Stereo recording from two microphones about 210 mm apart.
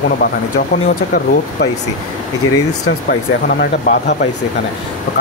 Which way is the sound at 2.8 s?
50° left (ahead or behind).